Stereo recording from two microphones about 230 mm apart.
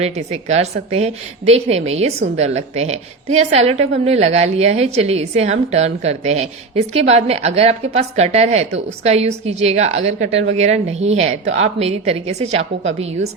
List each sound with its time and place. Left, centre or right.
0.0 s a woman's voice: right